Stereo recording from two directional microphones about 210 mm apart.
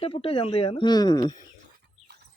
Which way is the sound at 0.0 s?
25° left (ahead or behind).